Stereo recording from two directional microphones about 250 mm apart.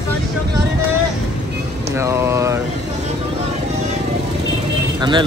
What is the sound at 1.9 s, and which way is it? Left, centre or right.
Speech, centre.